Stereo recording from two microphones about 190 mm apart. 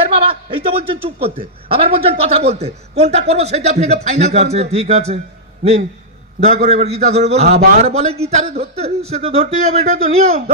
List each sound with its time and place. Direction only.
0.2 s a man's voice: 30° right (ahead or behind)